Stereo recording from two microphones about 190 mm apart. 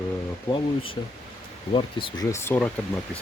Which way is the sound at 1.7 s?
25° left (ahead or behind).